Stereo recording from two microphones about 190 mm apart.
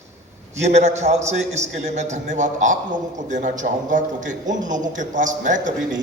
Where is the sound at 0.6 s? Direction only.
35° right (ahead or behind).